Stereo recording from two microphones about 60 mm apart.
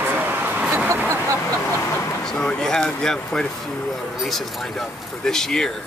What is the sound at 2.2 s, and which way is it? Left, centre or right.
Speech, centre.